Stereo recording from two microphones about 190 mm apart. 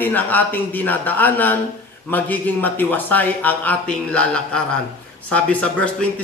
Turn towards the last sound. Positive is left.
turn(degrees=5)  # may be behind; listen again after turning